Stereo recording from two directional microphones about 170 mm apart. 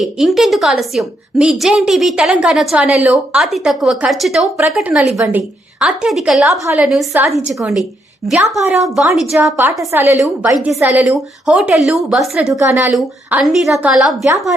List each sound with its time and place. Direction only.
0.0 s a woman's voice: centre (ahead or behind)
6.5 s speech: 15° right (ahead or behind)
6.8 s a woman's voice: centre (ahead or behind)
7.1 s speech: 15° right (ahead or behind)
7.3 s a woman's voice: 5° right (ahead or behind)
9.9 s a woman's voice: 15° right (ahead or behind)